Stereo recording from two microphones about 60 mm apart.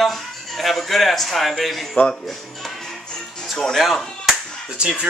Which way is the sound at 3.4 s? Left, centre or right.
Centre.